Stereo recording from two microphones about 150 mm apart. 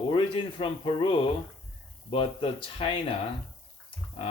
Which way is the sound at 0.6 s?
35° left (ahead or behind).